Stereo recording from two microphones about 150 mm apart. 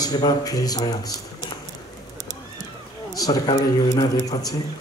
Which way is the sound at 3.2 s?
25° left (ahead or behind).